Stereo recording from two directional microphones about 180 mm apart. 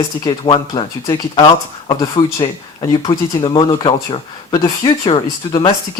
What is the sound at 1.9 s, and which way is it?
A man's voice, 30° left (ahead or behind).